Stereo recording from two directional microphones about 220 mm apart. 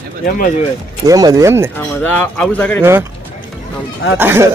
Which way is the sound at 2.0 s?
5° left (ahead or behind).